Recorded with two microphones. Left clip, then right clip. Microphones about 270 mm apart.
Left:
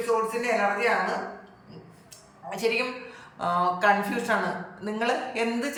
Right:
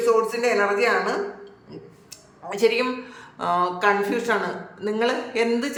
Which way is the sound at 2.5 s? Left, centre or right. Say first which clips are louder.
Right 6 dB; centre.